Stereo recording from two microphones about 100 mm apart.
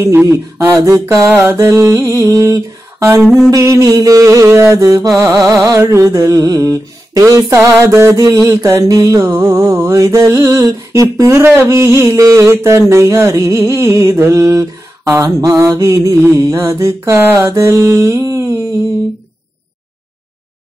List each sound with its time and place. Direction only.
0.0 s mantra: 25° right (ahead or behind)